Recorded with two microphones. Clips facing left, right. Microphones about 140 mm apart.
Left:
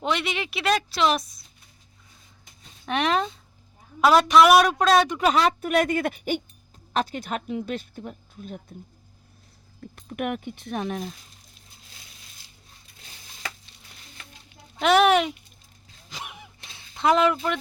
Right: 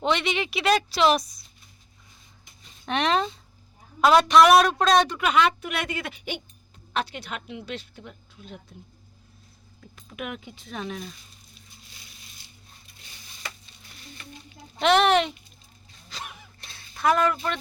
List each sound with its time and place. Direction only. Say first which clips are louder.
0.0 s speech: right 2 dB; 5° left (ahead or behind)
2.8 s speech: even; 5° left (ahead or behind)
5.2 s speech: left 1 dB; 35° left (ahead or behind)
10.1 s speech: left 7 dB; 55° left (ahead or behind)
14.8 s speech: left 1 dB; 5° left (ahead or behind)
16.0 s a sound: left 1 dB; 15° left (ahead or behind)